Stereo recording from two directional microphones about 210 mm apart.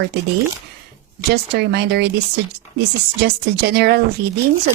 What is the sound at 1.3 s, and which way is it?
Speech, 50° right (ahead or behind).